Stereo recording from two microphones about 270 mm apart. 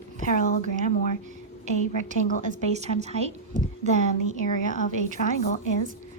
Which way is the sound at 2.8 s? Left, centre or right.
Right.